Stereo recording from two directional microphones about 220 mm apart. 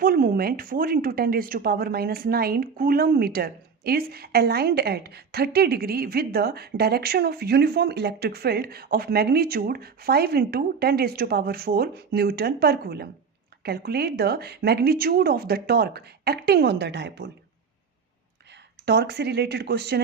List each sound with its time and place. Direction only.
0.0 s speech: 40° right (ahead or behind)
18.9 s speech: 45° right (ahead or behind)